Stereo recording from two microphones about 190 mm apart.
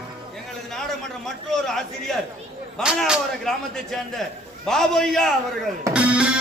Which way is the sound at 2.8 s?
5° right (ahead or behind).